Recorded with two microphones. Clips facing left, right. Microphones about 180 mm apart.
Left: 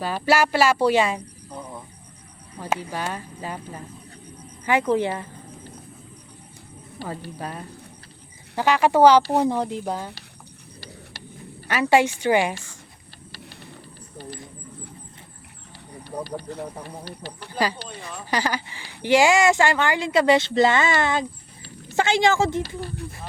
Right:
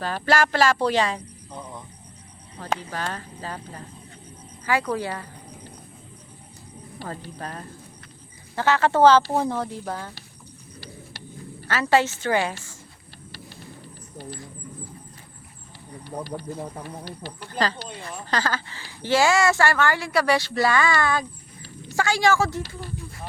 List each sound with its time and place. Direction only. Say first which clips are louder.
0.0 s speech: left 2 dB; 10° left (ahead or behind)
4.6 s speech: left 4 dB; 20° left (ahead or behind)
7.0 s speech: left 3 dB; 10° left (ahead or behind)
11.7 s speech: left 2 dB; 15° left (ahead or behind)
17.5 s a woman's voice: left 1 dB; 10° left (ahead or behind)